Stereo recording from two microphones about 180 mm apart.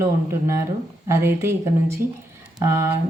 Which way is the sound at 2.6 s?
15° right (ahead or behind).